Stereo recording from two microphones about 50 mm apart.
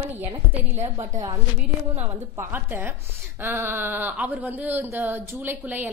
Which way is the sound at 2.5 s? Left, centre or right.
Right.